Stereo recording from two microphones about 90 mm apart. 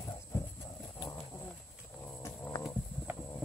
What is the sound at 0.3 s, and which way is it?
Horse, 25° left (ahead or behind).